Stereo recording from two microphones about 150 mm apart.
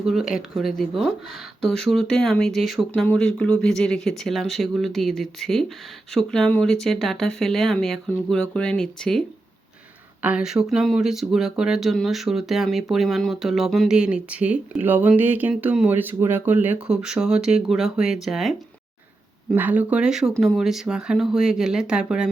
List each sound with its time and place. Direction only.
0.0 s speech: centre (ahead or behind)
10.2 s speech: 5° right (ahead or behind)
19.5 s speech: 10° right (ahead or behind)